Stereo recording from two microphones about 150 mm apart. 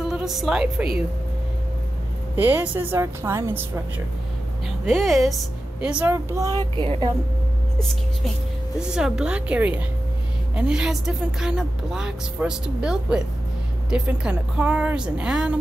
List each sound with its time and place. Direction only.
0.1 s a woman's voice: centre (ahead or behind)
2.3 s speech: 10° right (ahead or behind)
4.8 s speech: centre (ahead or behind)
6.1 s speech: 20° right (ahead or behind)
6.8 s speech: 35° right (ahead or behind)
8.7 s a woman's voice: 5° right (ahead or behind)